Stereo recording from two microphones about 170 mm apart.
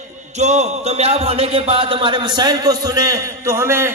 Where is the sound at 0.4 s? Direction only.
40° right (ahead or behind).